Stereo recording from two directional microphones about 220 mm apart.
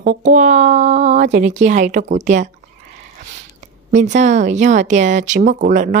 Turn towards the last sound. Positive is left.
turn(degrees=-35)  # may be behind; listen again after turning